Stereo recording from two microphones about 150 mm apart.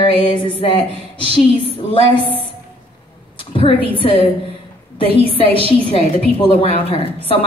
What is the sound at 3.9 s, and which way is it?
Speech, 35° left (ahead or behind).